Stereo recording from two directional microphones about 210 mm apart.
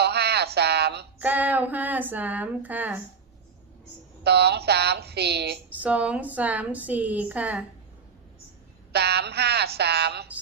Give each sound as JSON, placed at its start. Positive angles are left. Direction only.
{"t": 0.0, "sound": "a sound", "side_deg": -50}
{"t": 1.2, "sound": "a woman's voice", "side_deg": -10}
{"t": 4.2, "sound": "speech", "side_deg": -50}
{"t": 5.7, "sound": "a woman's voice", "side_deg": -5}
{"t": 8.9, "sound": "speech", "side_deg": -50}